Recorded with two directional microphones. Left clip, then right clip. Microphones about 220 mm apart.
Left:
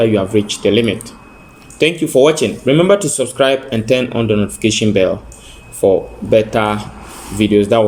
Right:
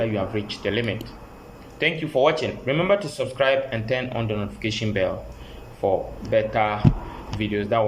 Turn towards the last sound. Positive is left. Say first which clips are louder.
# left 11 dB
turn(degrees=45)  # may be behind; listen again after turning